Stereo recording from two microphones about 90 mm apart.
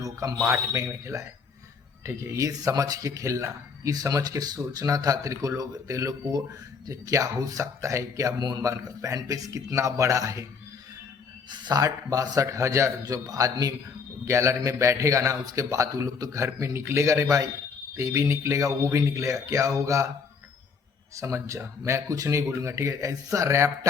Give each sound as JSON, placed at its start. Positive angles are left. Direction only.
{"t": 0.0, "sound": "a sound", "side_deg": -40}
{"t": 0.3, "sound": "a man's voice", "side_deg": -30}
{"t": 8.4, "sound": "speech", "side_deg": -50}
{"t": 8.6, "sound": "a man's voice", "side_deg": -40}
{"t": 11.4, "sound": "speech", "side_deg": -55}
{"t": 11.8, "sound": "a man's voice", "side_deg": -40}
{"t": 21.2, "sound": "a man's voice", "side_deg": -35}